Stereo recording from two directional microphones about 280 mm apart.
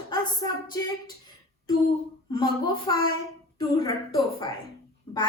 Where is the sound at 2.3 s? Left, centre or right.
Centre.